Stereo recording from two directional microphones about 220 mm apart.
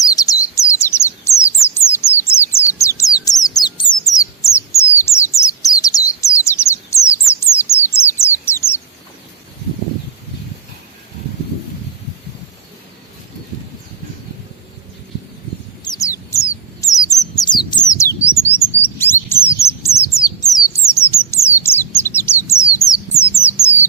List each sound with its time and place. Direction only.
0.0 s bird: 15° left (ahead or behind)
15.8 s bird: 15° left (ahead or behind)
18.5 s chirp: 10° left (ahead or behind)
19.5 s bird: 10° left (ahead or behind)